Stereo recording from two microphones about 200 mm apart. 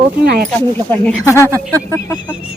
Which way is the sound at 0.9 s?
10° left (ahead or behind).